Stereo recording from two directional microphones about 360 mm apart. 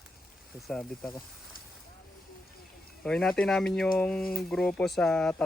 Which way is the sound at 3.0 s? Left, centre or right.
Centre.